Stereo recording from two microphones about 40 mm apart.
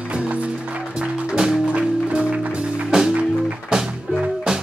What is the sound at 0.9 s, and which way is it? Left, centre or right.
Music, right.